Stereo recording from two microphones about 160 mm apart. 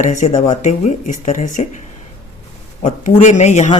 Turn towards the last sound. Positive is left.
turn(degrees=45)  # may be behind; listen again after turning